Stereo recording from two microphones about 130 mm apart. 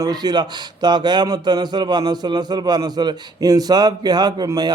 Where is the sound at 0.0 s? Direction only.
30° right (ahead or behind).